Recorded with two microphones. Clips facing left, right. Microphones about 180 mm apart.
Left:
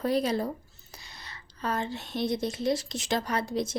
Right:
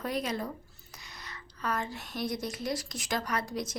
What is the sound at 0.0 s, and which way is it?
A woman's voice, 30° left (ahead or behind).